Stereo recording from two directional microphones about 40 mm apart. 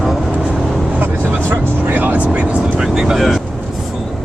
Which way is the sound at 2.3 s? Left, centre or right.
Right.